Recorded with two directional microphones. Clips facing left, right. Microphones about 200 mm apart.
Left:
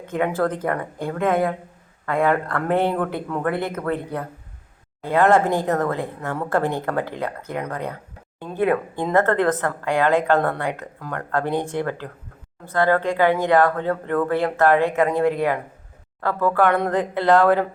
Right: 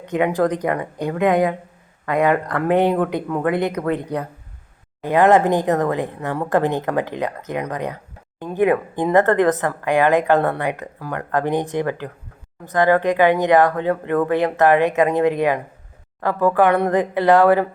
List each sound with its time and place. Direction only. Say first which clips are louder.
0.0 s speech: right 3 dB; 15° right (ahead or behind)